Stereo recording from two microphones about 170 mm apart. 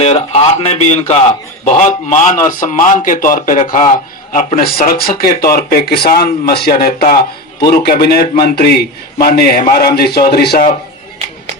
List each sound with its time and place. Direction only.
0.0 s a man's voice: 40° left (ahead or behind); by 10.7 s 70° left (ahead or behind)